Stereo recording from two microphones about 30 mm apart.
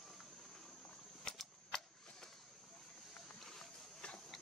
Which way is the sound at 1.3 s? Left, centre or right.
Left.